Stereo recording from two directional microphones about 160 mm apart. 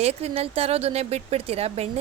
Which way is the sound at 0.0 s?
40° right (ahead or behind).